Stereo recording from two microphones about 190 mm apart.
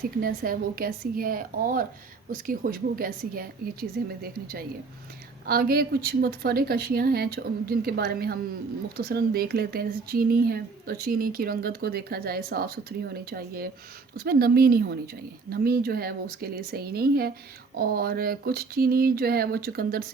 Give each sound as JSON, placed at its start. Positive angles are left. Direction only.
{"t": 0.0, "sound": "speech", "side_deg": -50}